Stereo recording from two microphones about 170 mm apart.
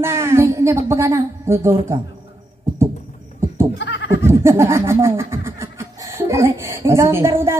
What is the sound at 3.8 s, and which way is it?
Goat, 90° left.